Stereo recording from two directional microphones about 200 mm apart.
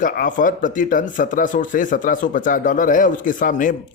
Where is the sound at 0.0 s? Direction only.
40° left (ahead or behind).